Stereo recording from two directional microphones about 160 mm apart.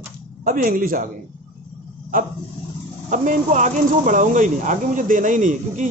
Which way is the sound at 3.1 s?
50° right (ahead or behind).